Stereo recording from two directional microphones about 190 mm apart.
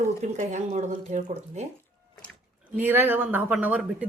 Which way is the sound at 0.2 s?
40° right (ahead or behind).